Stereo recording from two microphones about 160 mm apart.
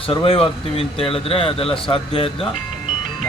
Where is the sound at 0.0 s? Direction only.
35° left (ahead or behind).